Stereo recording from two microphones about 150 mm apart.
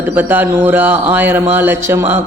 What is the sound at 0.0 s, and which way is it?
Speech, 15° right (ahead or behind).